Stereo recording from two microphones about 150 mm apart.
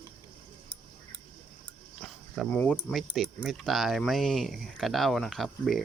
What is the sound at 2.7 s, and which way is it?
Speech, centre (ahead or behind).